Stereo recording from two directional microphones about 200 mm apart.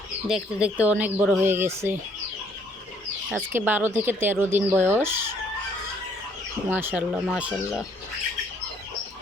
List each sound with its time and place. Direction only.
0.3 s speech: 5° right (ahead or behind)
3.2 s speech: 10° right (ahead or behind)
6.7 s speech: 10° right (ahead or behind)